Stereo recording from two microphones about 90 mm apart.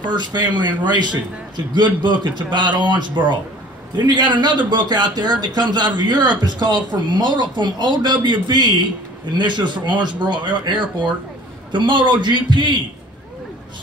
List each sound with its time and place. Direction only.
0.1 s a man's voice: 55° right (ahead or behind)